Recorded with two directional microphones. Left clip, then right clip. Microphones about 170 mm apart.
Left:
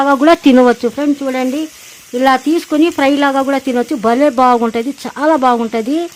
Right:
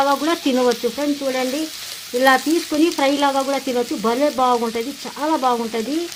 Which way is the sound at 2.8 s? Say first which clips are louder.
Left 5 dB; 40° left (ahead or behind).